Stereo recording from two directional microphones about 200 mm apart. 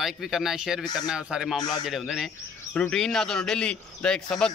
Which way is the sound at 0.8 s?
20° left (ahead or behind).